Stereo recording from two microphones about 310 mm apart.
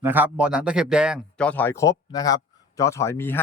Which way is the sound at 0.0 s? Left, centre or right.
Centre.